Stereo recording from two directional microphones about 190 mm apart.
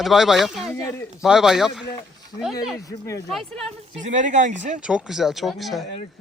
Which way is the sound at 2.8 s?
15° left (ahead or behind).